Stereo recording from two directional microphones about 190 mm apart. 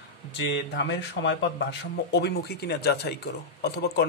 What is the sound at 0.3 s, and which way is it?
Speech, 65° left (ahead or behind).